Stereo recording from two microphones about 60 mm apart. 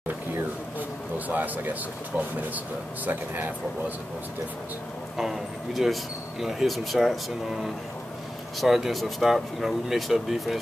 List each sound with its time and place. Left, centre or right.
1.1 s speech: right
5.1 s speech: centre